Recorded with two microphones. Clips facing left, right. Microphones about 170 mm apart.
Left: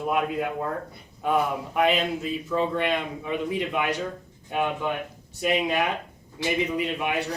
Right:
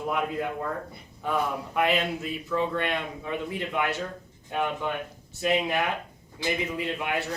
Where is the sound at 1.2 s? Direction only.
20° left (ahead or behind).